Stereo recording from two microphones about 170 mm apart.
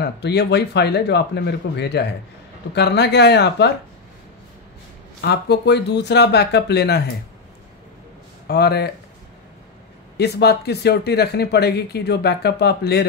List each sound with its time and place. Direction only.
0.0 s speech: 75° left (ahead or behind)
5.2 s speech: 75° left (ahead or behind)
8.5 s speech: 75° left (ahead or behind)
10.1 s speech: 75° left (ahead or behind)